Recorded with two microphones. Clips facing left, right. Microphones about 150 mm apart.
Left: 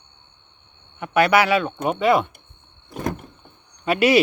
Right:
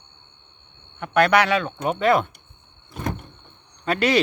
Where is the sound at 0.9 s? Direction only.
5° left (ahead or behind).